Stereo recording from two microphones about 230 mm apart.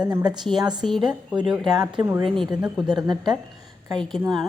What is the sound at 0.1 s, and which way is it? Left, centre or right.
Speech, centre.